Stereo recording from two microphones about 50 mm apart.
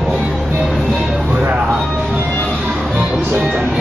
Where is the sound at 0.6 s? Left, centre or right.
Centre.